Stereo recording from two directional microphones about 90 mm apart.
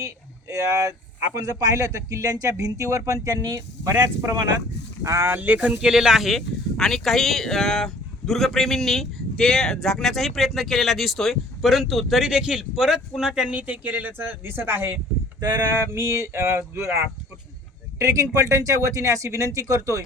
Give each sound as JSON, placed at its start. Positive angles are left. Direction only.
{"t": 0.0, "sound": "speech", "side_deg": -35}
{"t": 5.7, "sound": "speech", "side_deg": -5}